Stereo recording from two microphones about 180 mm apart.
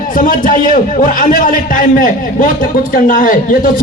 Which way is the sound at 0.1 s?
50° left (ahead or behind).